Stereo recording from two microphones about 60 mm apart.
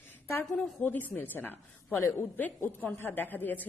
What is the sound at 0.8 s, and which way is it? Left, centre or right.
A woman's voice, left.